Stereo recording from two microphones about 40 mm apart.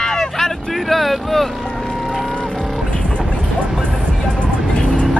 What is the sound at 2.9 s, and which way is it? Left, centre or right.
Vehicle, left.